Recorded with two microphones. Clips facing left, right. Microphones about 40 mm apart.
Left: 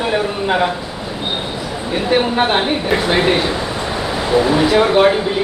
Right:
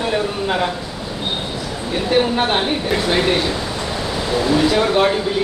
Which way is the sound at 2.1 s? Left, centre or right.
Centre.